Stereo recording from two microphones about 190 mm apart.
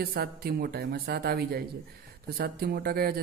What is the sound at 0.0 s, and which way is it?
Speech, 55° right (ahead or behind).